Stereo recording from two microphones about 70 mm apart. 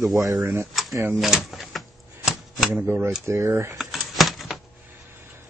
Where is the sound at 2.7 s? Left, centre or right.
Centre.